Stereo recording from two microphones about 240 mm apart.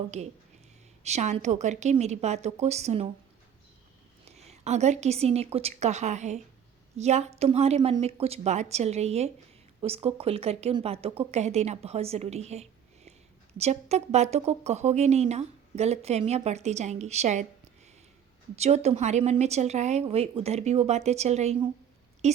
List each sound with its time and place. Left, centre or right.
1.0 s speech: right
4.3 s speech: right
18.5 s a woman's voice: right